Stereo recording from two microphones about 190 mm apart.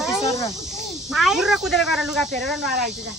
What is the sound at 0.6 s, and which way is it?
Speech, centre (ahead or behind).